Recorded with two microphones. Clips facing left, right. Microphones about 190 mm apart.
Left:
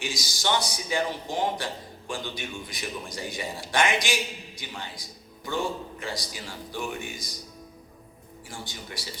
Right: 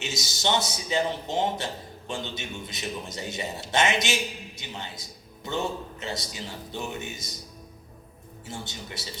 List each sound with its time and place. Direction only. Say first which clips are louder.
0.0 s a man's voice: right 1 dB; 25° right (ahead or behind)
8.4 s a man's voice: right 2 dB; 25° right (ahead or behind)